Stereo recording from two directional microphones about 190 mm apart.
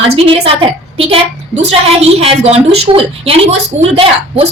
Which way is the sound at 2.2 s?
30° right (ahead or behind).